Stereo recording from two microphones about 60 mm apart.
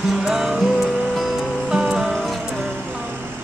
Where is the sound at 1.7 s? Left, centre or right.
Centre.